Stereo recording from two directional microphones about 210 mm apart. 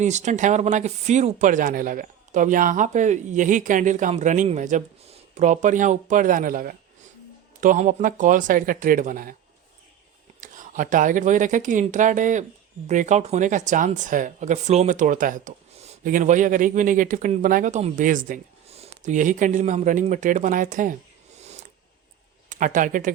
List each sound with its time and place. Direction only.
0.0 s speech: 35° right (ahead or behind)
10.4 s speech: 40° right (ahead or behind)
22.4 s speech: 35° right (ahead or behind)